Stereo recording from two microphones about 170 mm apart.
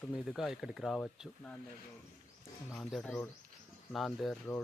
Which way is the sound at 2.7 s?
5° left (ahead or behind).